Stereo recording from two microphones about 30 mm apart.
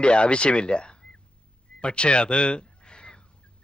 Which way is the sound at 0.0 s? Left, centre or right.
Left.